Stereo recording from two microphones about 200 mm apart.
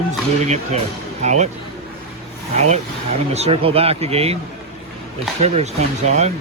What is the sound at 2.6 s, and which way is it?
Speech, 35° right (ahead or behind).